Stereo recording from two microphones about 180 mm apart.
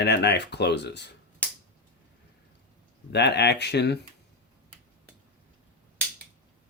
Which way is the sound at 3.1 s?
70° left (ahead or behind).